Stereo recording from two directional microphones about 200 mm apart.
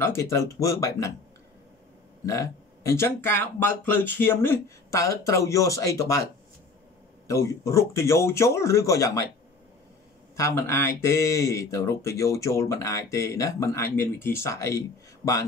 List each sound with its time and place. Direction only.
0.0 s speech: 15° left (ahead or behind)
2.2 s speech: 15° left (ahead or behind)
7.2 s speech: 15° left (ahead or behind)
10.3 s speech: 15° left (ahead or behind)